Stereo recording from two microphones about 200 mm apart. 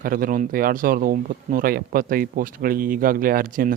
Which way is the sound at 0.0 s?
45° right (ahead or behind).